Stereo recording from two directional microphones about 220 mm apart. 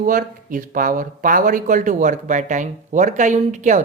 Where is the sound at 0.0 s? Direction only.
35° right (ahead or behind).